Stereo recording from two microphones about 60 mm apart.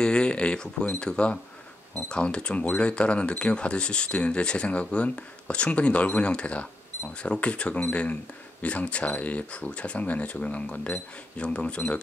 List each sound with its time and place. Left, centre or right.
0.0 s speech: centre